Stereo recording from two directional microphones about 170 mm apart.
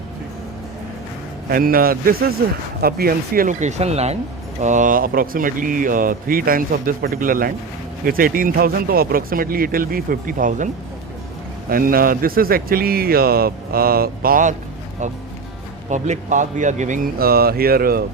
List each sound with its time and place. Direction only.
1.5 s speech: 60° right (ahead or behind)
11.7 s speech: 60° right (ahead or behind)
15.9 s speech: 45° right (ahead or behind)
17.2 s speech: 65° right (ahead or behind)